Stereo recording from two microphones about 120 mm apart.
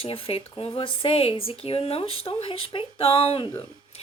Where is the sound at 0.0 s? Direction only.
50° left (ahead or behind).